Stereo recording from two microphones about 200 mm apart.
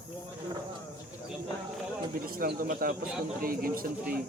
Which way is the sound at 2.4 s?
45° right (ahead or behind).